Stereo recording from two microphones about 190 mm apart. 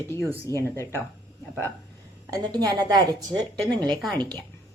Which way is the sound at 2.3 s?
20° right (ahead or behind).